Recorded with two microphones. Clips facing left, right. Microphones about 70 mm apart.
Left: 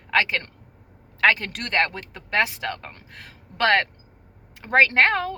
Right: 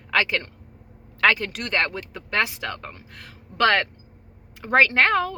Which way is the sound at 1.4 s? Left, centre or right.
Left.